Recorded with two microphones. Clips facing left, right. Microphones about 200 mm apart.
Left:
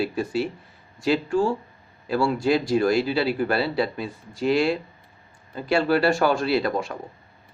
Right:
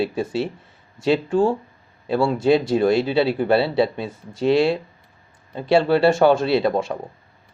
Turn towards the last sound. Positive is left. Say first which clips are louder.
# right 4 dB
turn(degrees=-25)  # may be behind; listen again after turning